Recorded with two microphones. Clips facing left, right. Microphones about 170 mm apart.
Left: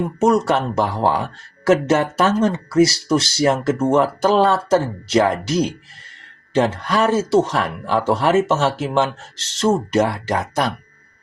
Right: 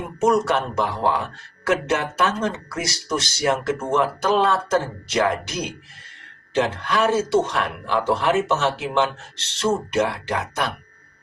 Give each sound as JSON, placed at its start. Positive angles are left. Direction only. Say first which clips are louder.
{"t": 0.2, "sound": "speech", "louder": "left 2 dB", "side_deg": 35}